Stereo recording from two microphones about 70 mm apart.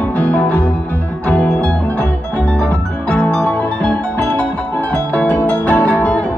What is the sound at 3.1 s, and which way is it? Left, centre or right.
Music, centre.